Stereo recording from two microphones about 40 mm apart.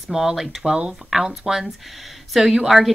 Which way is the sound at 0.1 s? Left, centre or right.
Centre.